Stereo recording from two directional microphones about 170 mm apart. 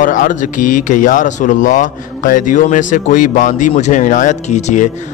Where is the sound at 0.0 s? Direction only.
50° left (ahead or behind).